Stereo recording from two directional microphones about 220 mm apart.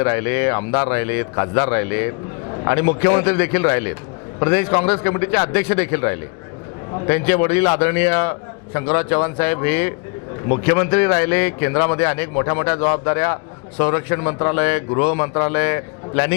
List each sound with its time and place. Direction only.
0.0 s a man's voice: 15° left (ahead or behind)